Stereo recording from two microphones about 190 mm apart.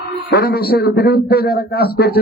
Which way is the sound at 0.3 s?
55° left (ahead or behind).